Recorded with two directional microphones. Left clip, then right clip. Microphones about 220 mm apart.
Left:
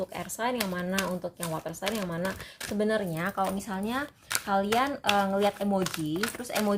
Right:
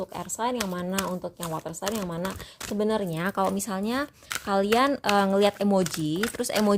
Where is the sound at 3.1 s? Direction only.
50° right (ahead or behind).